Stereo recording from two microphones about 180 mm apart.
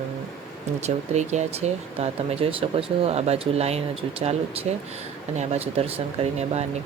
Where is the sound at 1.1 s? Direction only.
40° right (ahead or behind).